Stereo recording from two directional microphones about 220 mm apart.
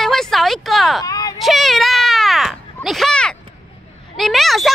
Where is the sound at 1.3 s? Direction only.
Centre (ahead or behind).